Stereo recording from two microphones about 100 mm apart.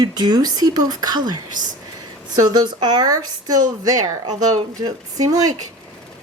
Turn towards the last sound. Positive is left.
turn(degrees=-40)  # may be behind; listen again after turning